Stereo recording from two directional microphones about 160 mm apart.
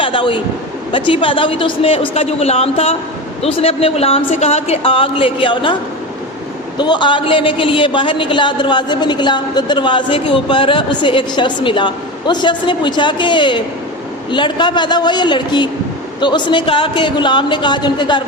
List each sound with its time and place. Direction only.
0.0 s a sound: 30° left (ahead or behind)
0.9 s speech: 30° left (ahead or behind)
6.7 s a man's voice: 30° left (ahead or behind)